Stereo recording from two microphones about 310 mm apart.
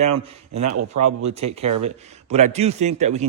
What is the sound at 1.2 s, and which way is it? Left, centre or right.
A man's voice, right.